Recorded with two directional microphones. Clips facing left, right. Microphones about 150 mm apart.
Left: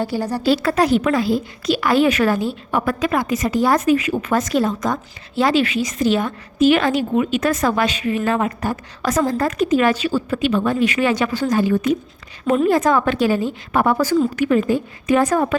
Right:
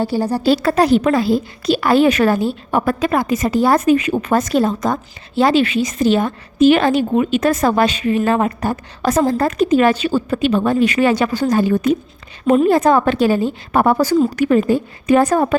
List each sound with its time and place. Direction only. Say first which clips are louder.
0.0 s a woman's voice: right 3 dB; 30° right (ahead or behind)